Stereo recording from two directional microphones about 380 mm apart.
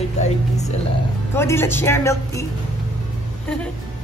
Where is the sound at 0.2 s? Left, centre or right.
Centre.